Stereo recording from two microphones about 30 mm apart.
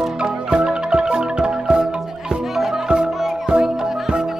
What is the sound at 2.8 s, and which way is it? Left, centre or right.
Music, right.